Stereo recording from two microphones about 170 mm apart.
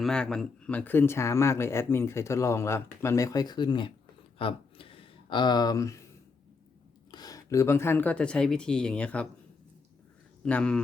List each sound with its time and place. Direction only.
0.0 s speech: 5° left (ahead or behind); by 3.9 s 30° left (ahead or behind)
4.4 s a sound: 30° left (ahead or behind)
7.1 s speech: 20° left (ahead or behind); by 9.2 s 5° left (ahead or behind)
10.4 s speech: 5° left (ahead or behind)